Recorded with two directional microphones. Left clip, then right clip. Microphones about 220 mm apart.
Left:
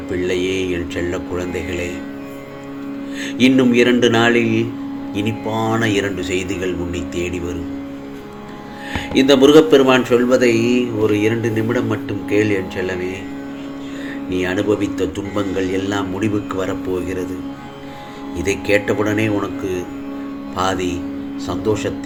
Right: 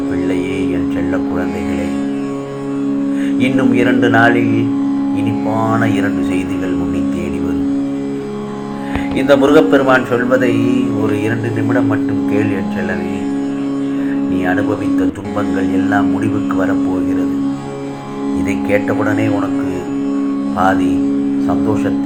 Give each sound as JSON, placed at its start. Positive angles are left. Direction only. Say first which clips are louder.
{"t": 3.3, "sound": "speech", "louder": "left 2 dB", "side_deg": 50}
{"t": 5.7, "sound": "speech", "louder": "right 3 dB", "side_deg": 50}
{"t": 9.1, "sound": "speech", "louder": "even", "side_deg": 50}
{"t": 14.3, "sound": "speech", "louder": "right 2 dB", "side_deg": 50}
{"t": 15.9, "sound": "speech", "louder": "right 6 dB", "side_deg": 50}
{"t": 18.7, "sound": "speech", "louder": "right 1 dB", "side_deg": 50}